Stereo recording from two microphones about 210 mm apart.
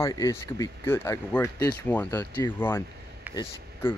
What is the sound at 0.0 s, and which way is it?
Speech, 15° left (ahead or behind).